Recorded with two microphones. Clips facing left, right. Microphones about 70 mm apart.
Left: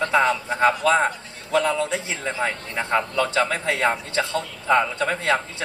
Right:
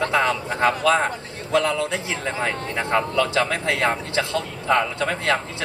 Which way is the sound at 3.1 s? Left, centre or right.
Left.